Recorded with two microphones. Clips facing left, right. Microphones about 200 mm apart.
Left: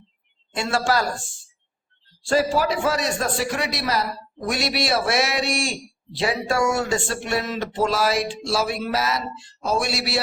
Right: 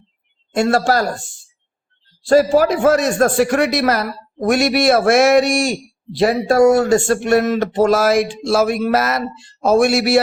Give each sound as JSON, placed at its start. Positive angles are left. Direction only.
{"t": 0.5, "sound": "speech", "side_deg": -45}
{"t": 2.2, "sound": "speech", "side_deg": -45}